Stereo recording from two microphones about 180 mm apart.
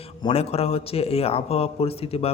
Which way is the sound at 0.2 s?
30° left (ahead or behind).